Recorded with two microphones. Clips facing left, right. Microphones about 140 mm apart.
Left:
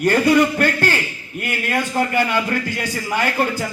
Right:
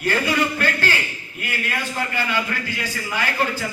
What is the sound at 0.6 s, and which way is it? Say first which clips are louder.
A man's voice: left 4 dB; 50° left (ahead or behind).